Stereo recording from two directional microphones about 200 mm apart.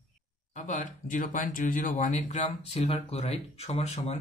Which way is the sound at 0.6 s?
40° left (ahead or behind).